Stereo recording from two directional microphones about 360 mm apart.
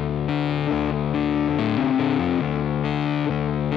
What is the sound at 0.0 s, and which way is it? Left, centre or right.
Music, centre.